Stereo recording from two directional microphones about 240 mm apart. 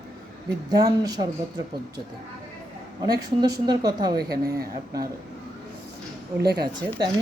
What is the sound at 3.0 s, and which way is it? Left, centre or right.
Speech, centre.